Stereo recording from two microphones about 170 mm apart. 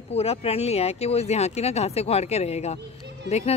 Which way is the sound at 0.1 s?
35° left (ahead or behind).